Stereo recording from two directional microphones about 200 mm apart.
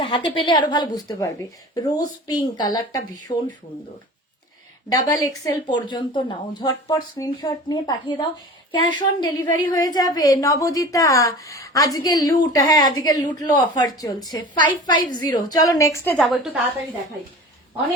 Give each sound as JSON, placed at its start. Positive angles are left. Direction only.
{"t": 0.0, "sound": "a woman's voice", "side_deg": 25}
{"t": 5.0, "sound": "a woman's voice", "side_deg": 15}
{"t": 16.3, "sound": "a woman's voice", "side_deg": 0}